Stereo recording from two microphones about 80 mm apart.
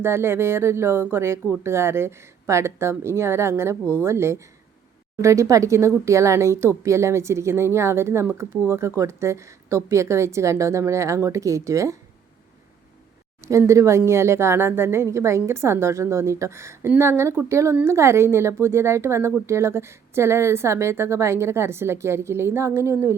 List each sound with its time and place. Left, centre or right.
0.0 s speech: right
13.4 s speech: right